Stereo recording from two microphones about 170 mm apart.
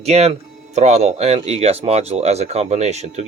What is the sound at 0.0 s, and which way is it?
Speech, 40° right (ahead or behind).